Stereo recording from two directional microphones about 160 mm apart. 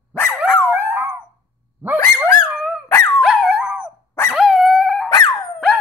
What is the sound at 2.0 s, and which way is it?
Dog, 20° left (ahead or behind).